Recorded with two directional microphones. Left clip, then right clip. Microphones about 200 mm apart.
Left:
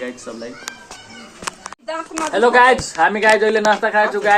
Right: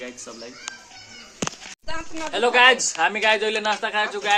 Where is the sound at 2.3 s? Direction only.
5° right (ahead or behind).